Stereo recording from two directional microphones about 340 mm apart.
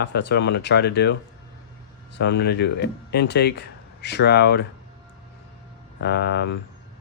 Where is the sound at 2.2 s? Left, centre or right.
Left.